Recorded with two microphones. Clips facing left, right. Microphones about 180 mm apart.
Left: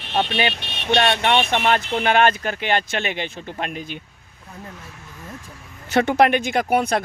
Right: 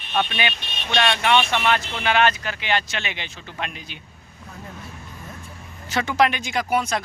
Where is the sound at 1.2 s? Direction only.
50° left (ahead or behind).